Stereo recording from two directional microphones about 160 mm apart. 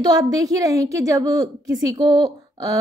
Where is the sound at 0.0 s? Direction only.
25° right (ahead or behind).